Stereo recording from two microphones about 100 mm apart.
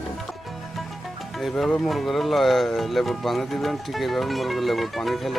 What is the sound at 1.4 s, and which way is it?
Speech, centre (ahead or behind).